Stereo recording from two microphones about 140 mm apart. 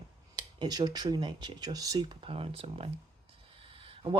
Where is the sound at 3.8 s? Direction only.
40° right (ahead or behind).